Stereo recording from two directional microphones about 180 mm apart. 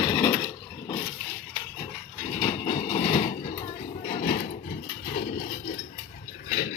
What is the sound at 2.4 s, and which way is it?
Train, 30° left (ahead or behind).